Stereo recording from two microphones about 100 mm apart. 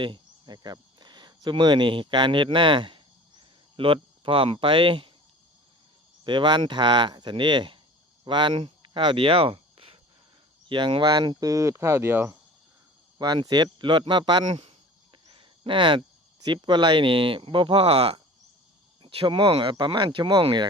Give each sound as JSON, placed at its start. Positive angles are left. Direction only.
{"t": 0.0, "sound": "speech", "side_deg": -50}
{"t": 6.2, "sound": "speech", "side_deg": -50}
{"t": 10.7, "sound": "speech", "side_deg": -55}
{"t": 13.1, "sound": "speech", "side_deg": -45}
{"t": 16.4, "sound": "speech", "side_deg": -45}
{"t": 19.0, "sound": "speech", "side_deg": -60}